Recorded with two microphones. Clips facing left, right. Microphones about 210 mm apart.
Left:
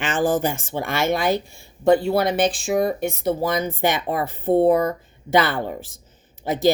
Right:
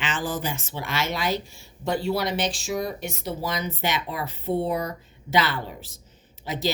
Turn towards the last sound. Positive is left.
turn(degrees=50)  # may be behind; listen again after turning